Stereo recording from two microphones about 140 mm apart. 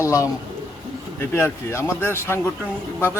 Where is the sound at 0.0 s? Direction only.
25° left (ahead or behind).